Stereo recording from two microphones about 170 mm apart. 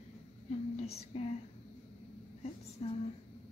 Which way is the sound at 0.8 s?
35° left (ahead or behind).